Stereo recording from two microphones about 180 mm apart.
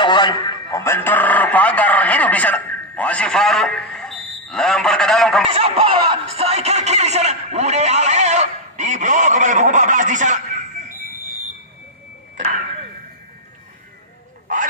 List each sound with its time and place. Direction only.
0.0 s a man's voice: 25° left (ahead or behind); by 5.5 s centre (ahead or behind)
5.5 s speech: 30° right (ahead or behind)